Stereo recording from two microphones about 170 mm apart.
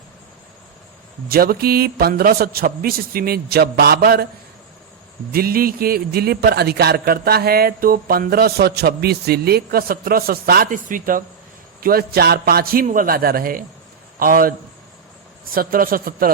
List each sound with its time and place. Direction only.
1.3 s a man's voice: 60° right (ahead or behind)
5.3 s a man's voice: 60° right (ahead or behind)